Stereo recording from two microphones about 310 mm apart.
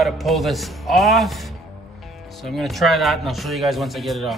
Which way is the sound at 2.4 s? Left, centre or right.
Centre.